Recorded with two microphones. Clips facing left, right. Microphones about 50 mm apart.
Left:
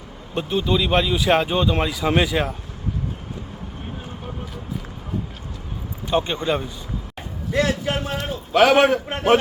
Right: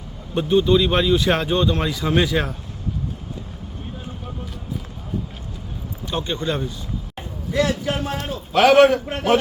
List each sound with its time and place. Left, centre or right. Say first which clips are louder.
0.3 s speech: right 5 dB; centre
6.1 s speech: left 3 dB; centre
7.5 s a sound: even; left
8.5 s speech: right 1 dB; centre
9.0 s a man's voice: left 1 dB; left